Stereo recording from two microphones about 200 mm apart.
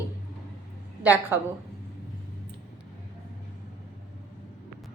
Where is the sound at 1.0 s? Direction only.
10° right (ahead or behind).